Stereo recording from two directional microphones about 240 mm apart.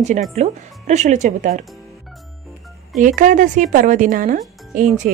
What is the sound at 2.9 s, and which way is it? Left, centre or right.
A woman's voice, right.